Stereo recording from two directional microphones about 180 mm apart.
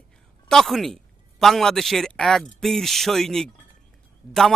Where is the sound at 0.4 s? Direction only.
Centre (ahead or behind).